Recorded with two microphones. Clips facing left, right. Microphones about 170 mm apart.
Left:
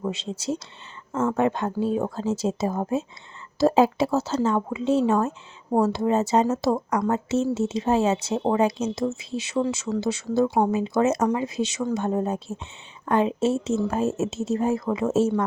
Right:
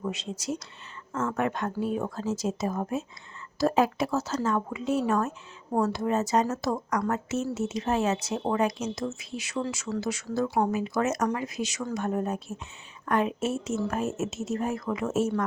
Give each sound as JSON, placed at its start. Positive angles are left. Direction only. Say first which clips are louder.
{"t": 0.0, "sound": "speech", "louder": "left 4 dB", "side_deg": 30}